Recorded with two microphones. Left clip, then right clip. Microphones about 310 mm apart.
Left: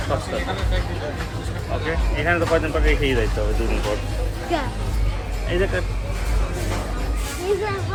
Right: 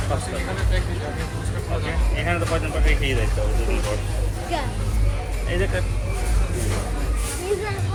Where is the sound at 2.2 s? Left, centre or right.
Left.